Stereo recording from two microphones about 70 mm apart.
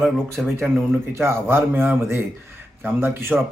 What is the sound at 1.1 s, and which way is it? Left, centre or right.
A man's voice, right.